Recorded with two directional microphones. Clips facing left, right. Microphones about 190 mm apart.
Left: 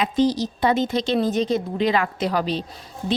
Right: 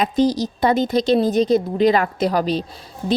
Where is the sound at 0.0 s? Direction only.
40° right (ahead or behind).